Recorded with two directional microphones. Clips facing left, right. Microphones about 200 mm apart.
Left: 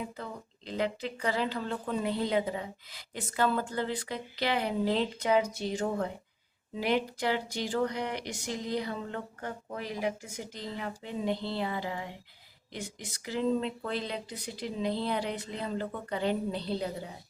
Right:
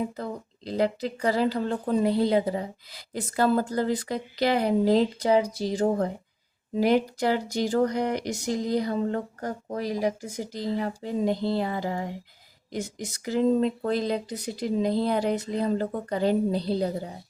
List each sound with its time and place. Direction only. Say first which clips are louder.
0.0 s speech: right 8 dB; 35° right (ahead or behind)